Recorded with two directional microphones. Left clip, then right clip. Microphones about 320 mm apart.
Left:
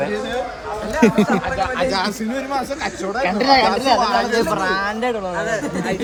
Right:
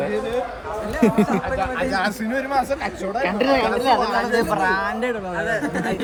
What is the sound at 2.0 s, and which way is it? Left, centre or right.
Speech, centre.